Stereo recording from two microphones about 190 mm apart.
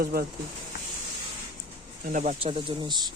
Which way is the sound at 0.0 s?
50° right (ahead or behind).